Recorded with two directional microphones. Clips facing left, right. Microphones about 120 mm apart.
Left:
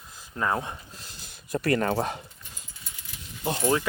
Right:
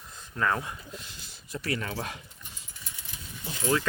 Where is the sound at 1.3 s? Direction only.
50° left (ahead or behind).